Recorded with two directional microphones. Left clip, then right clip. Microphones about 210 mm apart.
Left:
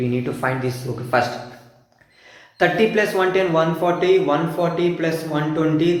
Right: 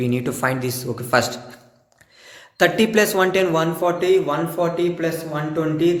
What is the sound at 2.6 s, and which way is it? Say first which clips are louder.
Speech: right 1 dB; 55° right (ahead or behind).